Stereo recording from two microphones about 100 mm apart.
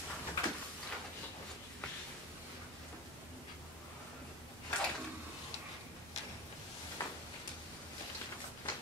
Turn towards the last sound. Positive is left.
turn(degrees=25)  # may be behind; listen again after turning